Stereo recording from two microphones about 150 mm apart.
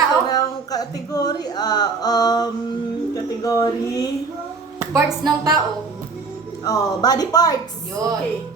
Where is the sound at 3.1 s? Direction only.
25° left (ahead or behind).